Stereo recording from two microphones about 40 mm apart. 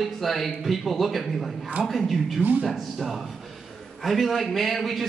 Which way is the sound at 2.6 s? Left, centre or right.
Centre.